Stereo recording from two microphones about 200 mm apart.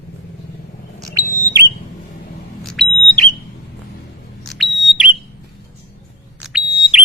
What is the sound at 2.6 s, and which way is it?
Smoke detector, centre (ahead or behind).